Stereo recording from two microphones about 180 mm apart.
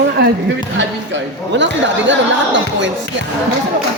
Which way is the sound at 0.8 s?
85° right.